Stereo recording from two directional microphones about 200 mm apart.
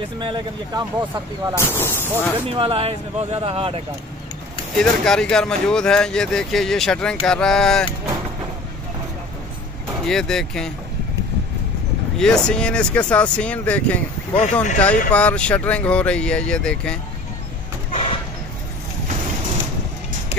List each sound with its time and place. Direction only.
0.2 s speech: 25° right (ahead or behind)
1.6 s speech: 10° left (ahead or behind)
2.4 s speech: 25° right (ahead or behind)
4.7 s speech: 5° left (ahead or behind)
10.0 s speech: 5° left (ahead or behind)
12.2 s speech: 5° left (ahead or behind)
14.3 s speech: 35° left (ahead or behind)
15.0 s speech: 5° left (ahead or behind)